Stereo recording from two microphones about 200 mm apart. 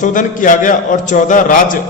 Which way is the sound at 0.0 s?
40° left (ahead or behind).